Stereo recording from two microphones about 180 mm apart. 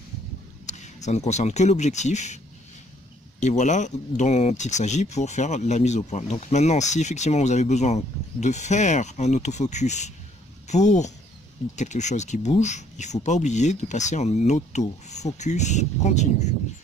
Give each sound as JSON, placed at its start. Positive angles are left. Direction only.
{"t": 0.7, "sound": "speech", "side_deg": 40}